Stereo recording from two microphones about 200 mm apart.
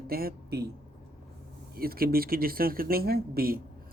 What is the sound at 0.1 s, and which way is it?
Speech, 50° right (ahead or behind).